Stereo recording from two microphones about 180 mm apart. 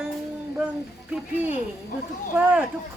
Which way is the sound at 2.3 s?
10° right (ahead or behind).